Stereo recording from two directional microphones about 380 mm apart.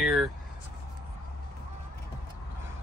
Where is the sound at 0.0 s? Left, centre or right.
Centre.